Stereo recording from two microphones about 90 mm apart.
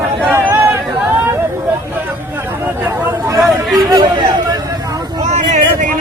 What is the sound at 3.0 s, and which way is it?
Chatter, 25° right (ahead or behind).